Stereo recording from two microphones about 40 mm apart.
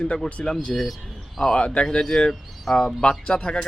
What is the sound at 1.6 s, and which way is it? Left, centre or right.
Speech, left.